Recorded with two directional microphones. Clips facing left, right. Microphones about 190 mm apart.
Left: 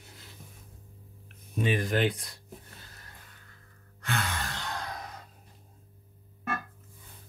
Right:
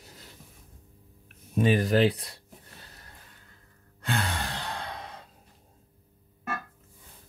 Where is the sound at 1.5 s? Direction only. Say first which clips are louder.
Right 5 dB; 40° right (ahead or behind).